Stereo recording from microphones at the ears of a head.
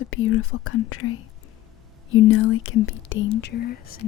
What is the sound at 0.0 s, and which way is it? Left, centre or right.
Speech, left.